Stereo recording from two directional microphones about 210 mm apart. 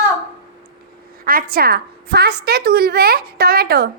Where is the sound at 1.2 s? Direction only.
45° right (ahead or behind).